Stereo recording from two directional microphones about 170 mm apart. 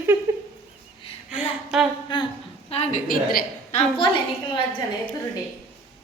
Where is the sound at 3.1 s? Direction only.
60° left (ahead or behind).